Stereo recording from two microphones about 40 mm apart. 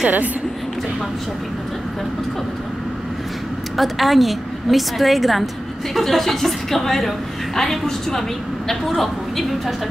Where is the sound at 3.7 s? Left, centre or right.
Centre.